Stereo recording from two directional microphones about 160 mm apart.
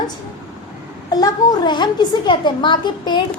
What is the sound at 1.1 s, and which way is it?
A woman's voice, 25° left (ahead or behind).